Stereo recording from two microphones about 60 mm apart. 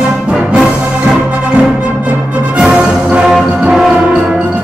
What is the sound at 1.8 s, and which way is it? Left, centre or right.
Music, right.